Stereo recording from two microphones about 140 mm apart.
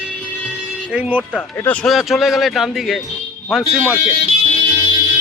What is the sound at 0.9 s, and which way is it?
Speech, 10° right (ahead or behind).